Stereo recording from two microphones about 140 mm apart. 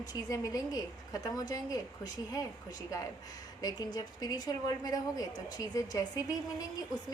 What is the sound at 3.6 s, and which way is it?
A woman's voice, 30° left (ahead or behind).